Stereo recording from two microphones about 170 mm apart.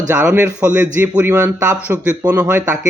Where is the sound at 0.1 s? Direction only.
10° right (ahead or behind).